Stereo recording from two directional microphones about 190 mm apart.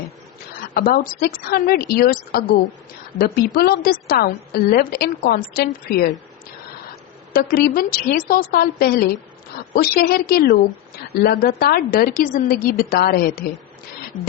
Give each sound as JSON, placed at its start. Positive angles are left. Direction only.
{"t": 0.6, "sound": "a woman's voice", "side_deg": 50}
{"t": 7.3, "sound": "a woman's voice", "side_deg": 50}